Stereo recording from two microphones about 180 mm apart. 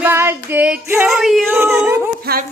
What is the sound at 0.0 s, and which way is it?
Female singing, 15° right (ahead or behind).